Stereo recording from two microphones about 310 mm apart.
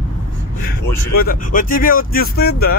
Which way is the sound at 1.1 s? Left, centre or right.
Left.